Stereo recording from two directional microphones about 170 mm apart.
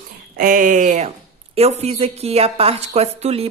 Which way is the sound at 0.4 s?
55° right (ahead or behind).